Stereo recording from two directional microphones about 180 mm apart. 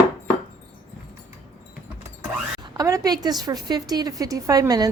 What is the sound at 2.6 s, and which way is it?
A woman's voice, 20° right (ahead or behind).